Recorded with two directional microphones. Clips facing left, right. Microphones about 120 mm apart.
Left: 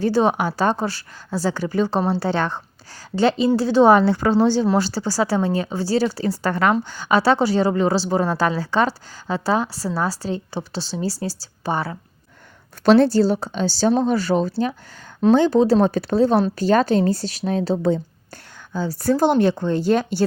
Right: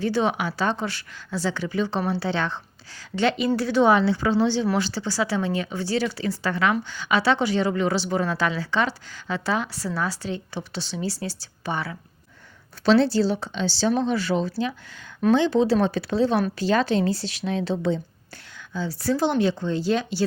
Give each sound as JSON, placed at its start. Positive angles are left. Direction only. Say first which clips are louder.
{"t": 0.0, "sound": "speech", "louder": "left 5 dB", "side_deg": 40}
{"t": 3.2, "sound": "speech", "louder": "left 5 dB", "side_deg": 35}
{"t": 12.8, "sound": "speech", "louder": "left 4 dB", "side_deg": 50}